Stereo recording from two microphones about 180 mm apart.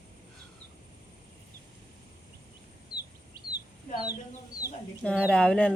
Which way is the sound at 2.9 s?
25° left (ahead or behind).